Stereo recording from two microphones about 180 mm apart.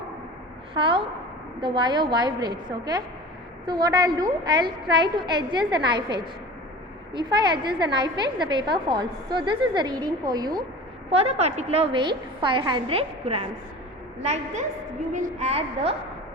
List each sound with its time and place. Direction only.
0.7 s a woman's voice: 30° right (ahead or behind)
11.1 s a woman's voice: 35° right (ahead or behind)